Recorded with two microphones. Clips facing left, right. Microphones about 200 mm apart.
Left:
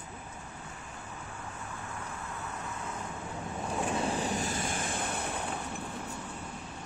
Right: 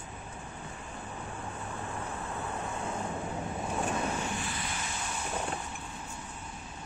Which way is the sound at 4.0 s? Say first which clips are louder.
Left 2 dB; 35° left (ahead or behind).